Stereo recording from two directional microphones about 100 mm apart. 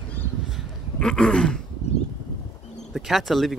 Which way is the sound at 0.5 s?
5° left (ahead or behind).